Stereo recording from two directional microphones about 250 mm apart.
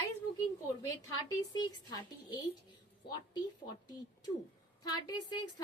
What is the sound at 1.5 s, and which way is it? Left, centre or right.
Speech, centre.